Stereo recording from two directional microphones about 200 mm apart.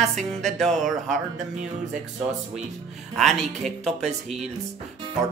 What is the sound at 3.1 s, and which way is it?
Music, centre (ahead or behind).